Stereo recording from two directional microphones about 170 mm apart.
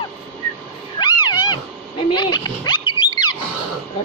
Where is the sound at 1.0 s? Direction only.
25° left (ahead or behind).